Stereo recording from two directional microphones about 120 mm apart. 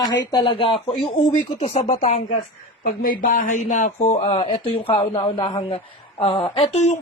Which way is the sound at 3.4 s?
90° left.